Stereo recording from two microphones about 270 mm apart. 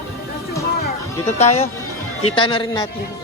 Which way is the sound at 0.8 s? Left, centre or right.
Left.